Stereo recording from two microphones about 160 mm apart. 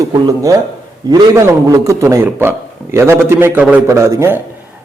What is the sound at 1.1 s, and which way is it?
A man's voice, 20° right (ahead or behind).